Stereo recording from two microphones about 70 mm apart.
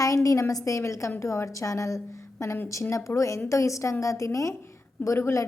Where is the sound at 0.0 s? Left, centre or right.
Left.